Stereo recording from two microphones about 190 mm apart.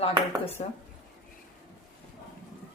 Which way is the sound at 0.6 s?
35° left (ahead or behind).